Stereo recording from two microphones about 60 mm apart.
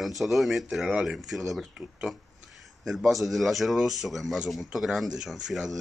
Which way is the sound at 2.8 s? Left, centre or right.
Centre.